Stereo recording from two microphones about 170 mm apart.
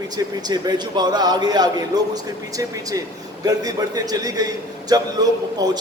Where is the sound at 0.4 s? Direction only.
25° right (ahead or behind).